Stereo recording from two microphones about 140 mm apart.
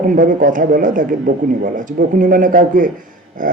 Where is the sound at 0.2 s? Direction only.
70° right (ahead or behind).